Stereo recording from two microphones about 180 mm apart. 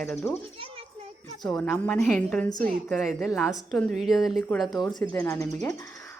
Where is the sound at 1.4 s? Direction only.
5° left (ahead or behind).